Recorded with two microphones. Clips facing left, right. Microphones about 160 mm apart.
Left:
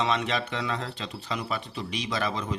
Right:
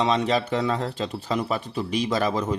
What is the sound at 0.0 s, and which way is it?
Speech, 35° right (ahead or behind).